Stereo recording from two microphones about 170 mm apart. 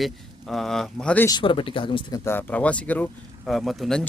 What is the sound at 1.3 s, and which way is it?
Speech, 30° left (ahead or behind).